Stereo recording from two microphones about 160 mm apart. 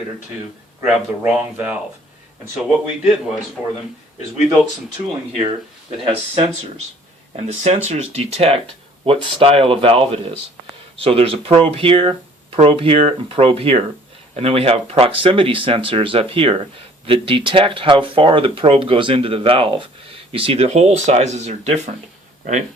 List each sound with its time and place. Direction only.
0.9 s a man's voice: 10° right (ahead or behind)
6.1 s speech: 40° right (ahead or behind)